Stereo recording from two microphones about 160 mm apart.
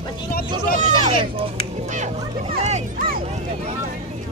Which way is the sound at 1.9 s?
50° right (ahead or behind).